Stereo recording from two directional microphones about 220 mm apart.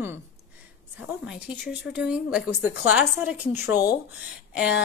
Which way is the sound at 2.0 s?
5° right (ahead or behind).